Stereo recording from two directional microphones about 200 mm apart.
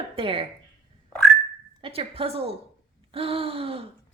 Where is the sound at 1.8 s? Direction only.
30° right (ahead or behind).